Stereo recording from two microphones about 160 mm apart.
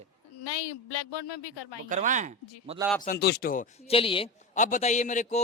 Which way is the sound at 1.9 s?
50° right (ahead or behind).